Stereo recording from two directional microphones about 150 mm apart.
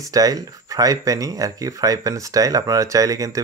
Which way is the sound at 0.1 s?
25° right (ahead or behind).